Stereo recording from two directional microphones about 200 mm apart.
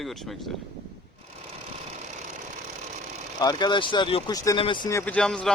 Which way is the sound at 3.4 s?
20° left (ahead or behind).